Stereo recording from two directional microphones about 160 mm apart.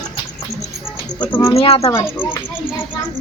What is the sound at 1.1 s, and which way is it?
Speech, 25° left (ahead or behind).